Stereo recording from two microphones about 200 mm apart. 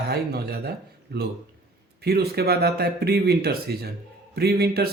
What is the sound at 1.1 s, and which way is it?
A man's voice, 55° right (ahead or behind).